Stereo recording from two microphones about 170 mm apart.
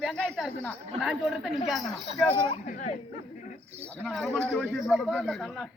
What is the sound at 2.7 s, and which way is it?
Speech, 45° left (ahead or behind).